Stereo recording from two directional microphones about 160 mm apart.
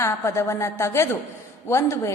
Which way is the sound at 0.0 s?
15° left (ahead or behind).